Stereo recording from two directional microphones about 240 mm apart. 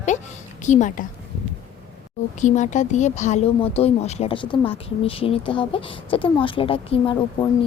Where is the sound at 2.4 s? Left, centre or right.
Left.